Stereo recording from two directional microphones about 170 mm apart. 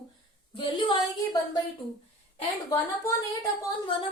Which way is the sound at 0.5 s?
30° left (ahead or behind).